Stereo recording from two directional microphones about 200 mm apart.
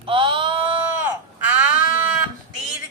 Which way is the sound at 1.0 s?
10° right (ahead or behind).